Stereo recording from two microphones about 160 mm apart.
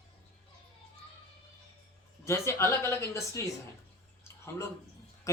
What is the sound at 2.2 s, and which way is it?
Speech, 15° left (ahead or behind).